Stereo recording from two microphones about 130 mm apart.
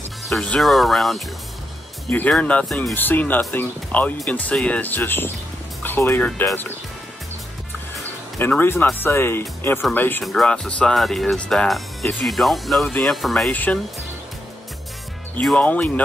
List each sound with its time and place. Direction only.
0.2 s speech: 5° left (ahead or behind)
2.0 s speech: 10° left (ahead or behind)
2.9 s speech: 15° left (ahead or behind)
8.4 s speech: 15° left (ahead or behind)
10.2 s speech: 5° left (ahead or behind)
13.5 s speech: 15° left (ahead or behind)
15.4 s speech: 10° left (ahead or behind)